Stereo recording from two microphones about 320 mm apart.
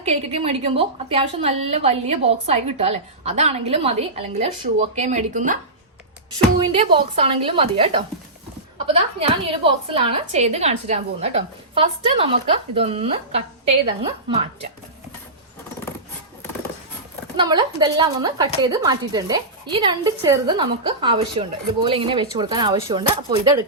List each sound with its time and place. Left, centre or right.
0.0 s a woman's voice: centre
6.6 s a woman's voice: centre
17.3 s a woman's voice: centre